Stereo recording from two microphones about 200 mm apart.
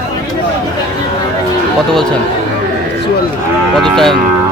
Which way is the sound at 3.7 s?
Centre (ahead or behind).